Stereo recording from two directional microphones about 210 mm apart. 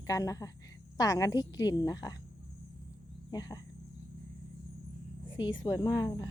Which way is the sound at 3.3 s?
20° left (ahead or behind).